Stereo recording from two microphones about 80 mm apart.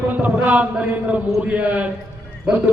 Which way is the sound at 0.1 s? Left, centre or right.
Right.